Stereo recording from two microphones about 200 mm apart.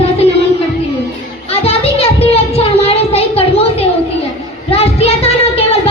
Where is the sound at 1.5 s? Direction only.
30° left (ahead or behind).